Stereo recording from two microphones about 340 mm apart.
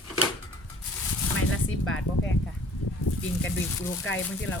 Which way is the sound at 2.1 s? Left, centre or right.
Left.